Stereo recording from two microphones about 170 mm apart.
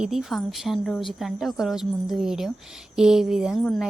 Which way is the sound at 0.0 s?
Centre (ahead or behind).